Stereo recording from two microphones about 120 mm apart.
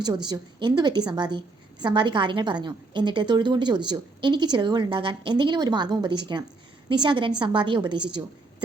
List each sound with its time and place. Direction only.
0.0 s a woman's voice: 35° right (ahead or behind)